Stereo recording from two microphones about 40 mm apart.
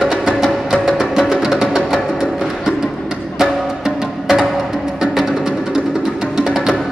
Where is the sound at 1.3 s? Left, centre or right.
Centre.